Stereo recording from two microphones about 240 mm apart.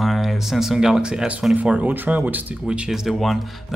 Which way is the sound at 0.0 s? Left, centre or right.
Centre.